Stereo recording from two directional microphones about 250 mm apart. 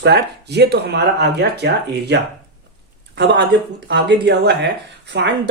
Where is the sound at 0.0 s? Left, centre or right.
Right.